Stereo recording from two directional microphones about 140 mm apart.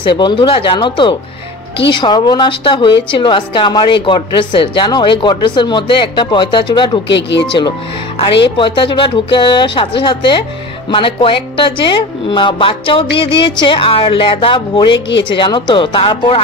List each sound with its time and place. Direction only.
0.0 s a woman's voice: 35° left (ahead or behind)